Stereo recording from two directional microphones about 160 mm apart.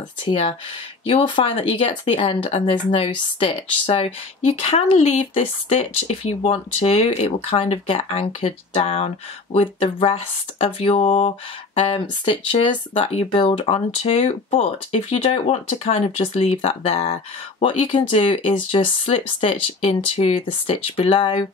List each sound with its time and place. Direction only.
0.2 s speech: 35° left (ahead or behind)
12.9 s speech: 35° left (ahead or behind)